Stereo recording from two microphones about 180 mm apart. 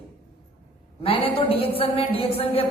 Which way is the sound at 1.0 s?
30° left (ahead or behind).